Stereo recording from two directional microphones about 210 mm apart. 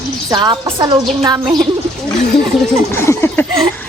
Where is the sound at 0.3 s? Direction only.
20° right (ahead or behind).